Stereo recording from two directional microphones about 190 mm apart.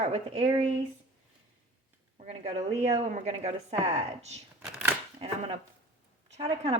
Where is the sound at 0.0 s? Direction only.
35° right (ahead or behind).